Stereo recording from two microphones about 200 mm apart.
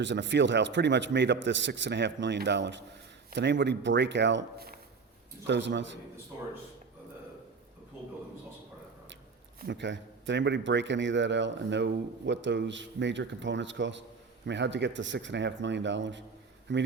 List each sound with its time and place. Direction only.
0.0 s a man's voice: 65° right (ahead or behind)
5.5 s a man's voice: 65° right (ahead or behind)
9.6 s a man's voice: 60° right (ahead or behind)